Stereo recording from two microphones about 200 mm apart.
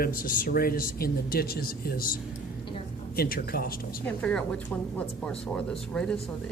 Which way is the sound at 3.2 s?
50° left (ahead or behind).